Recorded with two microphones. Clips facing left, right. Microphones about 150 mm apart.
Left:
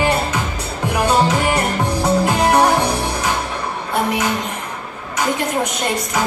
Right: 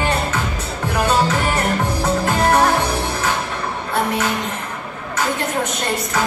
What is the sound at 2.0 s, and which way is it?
Music, 15° left (ahead or behind).